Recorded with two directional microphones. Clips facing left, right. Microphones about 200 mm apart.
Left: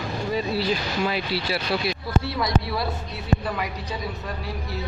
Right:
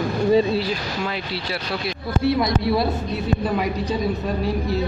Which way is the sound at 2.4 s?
25° right (ahead or behind).